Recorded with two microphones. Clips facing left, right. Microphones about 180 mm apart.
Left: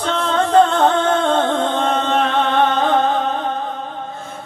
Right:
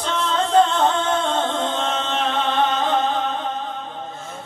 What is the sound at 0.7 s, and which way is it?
Music, 60° left (ahead or behind).